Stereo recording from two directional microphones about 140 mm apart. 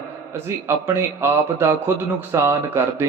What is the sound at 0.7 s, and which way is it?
A man's voice, 15° right (ahead or behind).